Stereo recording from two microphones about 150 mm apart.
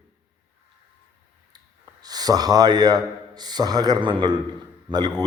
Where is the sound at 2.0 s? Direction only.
25° right (ahead or behind).